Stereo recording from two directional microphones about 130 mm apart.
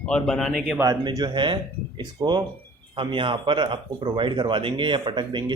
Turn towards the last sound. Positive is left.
turn(degrees=-35)  # may be behind; listen again after turning